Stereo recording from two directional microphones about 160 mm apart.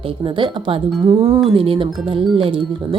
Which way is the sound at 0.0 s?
35° right (ahead or behind).